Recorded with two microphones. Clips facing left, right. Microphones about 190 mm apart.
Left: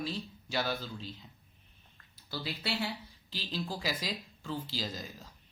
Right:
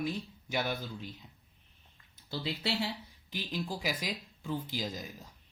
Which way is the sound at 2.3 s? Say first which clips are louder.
Right 2 dB; 25° right (ahead or behind).